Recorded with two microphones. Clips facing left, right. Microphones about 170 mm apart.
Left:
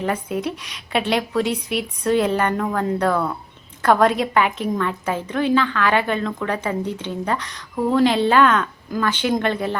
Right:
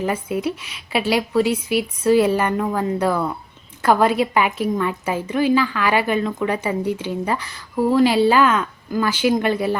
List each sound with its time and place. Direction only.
0.0 s a woman's voice: 5° right (ahead or behind)